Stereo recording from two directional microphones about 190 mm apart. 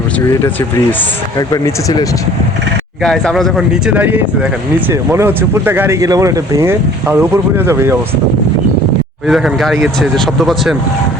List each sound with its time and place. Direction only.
1.4 s speech: 20° left (ahead or behind)
3.0 s speech: centre (ahead or behind)
9.2 s speech: centre (ahead or behind)